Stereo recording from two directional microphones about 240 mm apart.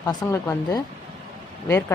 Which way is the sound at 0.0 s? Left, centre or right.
Centre.